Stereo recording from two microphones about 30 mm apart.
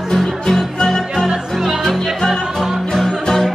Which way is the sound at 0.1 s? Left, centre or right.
Centre.